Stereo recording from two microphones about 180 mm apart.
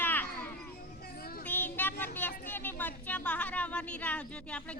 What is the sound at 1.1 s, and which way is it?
Child singing, 55° left (ahead or behind).